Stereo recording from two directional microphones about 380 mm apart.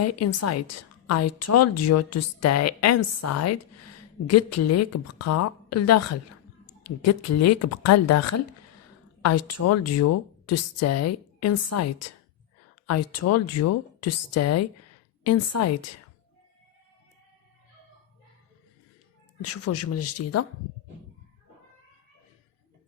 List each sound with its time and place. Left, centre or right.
0.0 s a woman's voice: left
19.5 s a woman's voice: left